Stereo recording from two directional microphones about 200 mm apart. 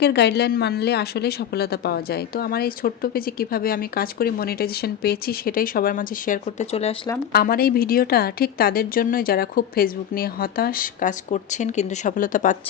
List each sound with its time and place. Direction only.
0.0 s a woman's voice: 55° left (ahead or behind); by 6.9 s 35° left (ahead or behind)
7.3 s a woman's voice: 50° left (ahead or behind)